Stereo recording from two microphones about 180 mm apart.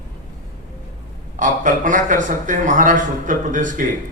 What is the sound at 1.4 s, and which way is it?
A man's voice, 45° right (ahead or behind).